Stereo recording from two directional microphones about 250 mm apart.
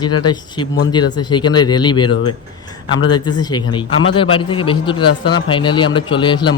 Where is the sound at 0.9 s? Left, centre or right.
Centre.